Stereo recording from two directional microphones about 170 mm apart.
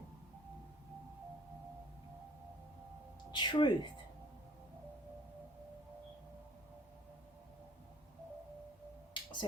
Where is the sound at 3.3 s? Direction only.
30° left (ahead or behind).